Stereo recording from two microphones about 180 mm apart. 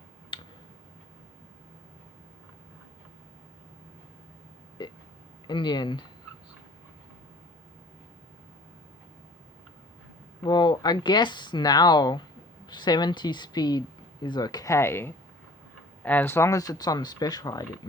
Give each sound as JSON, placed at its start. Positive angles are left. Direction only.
{"t": 0.3, "sound": "tick-tock", "side_deg": 30}
{"t": 4.8, "sound": "a sound", "side_deg": 25}
{"t": 5.5, "sound": "speech", "side_deg": 25}
{"t": 10.4, "sound": "speech", "side_deg": 25}